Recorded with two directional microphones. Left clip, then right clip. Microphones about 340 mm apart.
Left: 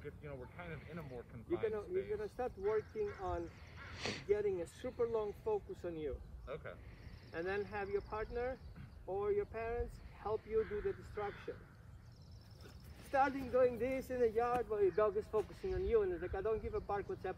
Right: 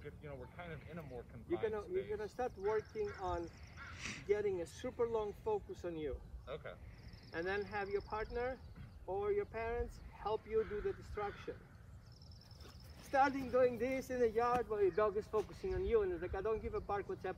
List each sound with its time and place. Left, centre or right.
0.0 s speech: centre
2.1 s a man's voice: centre
4.0 s speech: centre
4.3 s a man's voice: centre
6.4 s speech: centre
7.3 s a man's voice: right
13.1 s a man's voice: right